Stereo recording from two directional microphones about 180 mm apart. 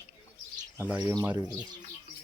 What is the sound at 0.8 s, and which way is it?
Speech, 10° right (ahead or behind).